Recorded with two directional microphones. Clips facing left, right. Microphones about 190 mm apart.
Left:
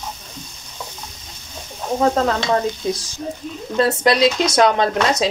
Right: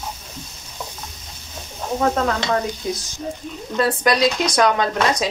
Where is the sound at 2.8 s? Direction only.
25° left (ahead or behind).